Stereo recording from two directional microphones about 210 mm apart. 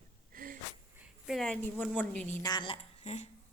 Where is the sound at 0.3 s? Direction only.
40° right (ahead or behind).